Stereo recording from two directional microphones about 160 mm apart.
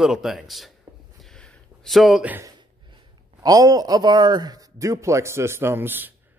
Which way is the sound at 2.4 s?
25° right (ahead or behind).